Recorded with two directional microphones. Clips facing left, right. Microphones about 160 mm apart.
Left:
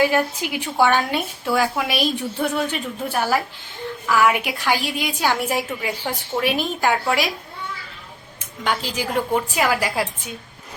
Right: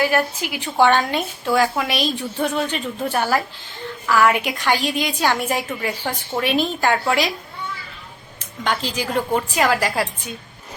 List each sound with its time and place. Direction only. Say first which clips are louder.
0.1 s a woman's voice: even; 15° left (ahead or behind)
0.8 s a woman's voice: right 2 dB; 5° left (ahead or behind)
8.6 s a woman's voice: right 1 dB; 10° left (ahead or behind)